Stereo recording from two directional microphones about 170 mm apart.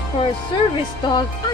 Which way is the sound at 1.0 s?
25° left (ahead or behind).